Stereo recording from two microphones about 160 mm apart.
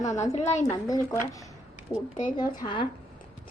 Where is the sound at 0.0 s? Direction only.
50° left (ahead or behind).